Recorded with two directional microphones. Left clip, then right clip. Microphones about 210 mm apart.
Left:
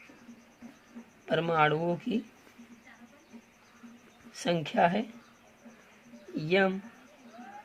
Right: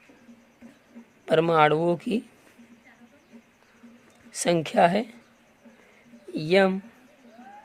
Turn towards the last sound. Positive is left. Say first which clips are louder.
# right 6 dB
turn(degrees=-30)  # may be behind; listen again after turning